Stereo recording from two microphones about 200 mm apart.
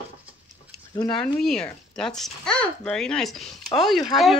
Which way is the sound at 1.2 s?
5° left (ahead or behind).